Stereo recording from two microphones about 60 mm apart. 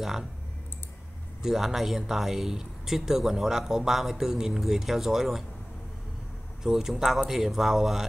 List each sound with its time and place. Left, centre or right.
0.0 s a man's voice: centre
1.4 s a man's voice: centre
6.6 s a man's voice: centre